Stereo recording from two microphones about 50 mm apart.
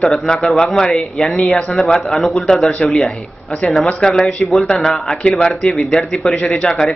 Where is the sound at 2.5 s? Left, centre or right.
Centre.